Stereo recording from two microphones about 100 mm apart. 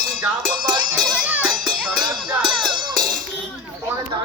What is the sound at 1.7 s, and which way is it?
Music, centre (ahead or behind).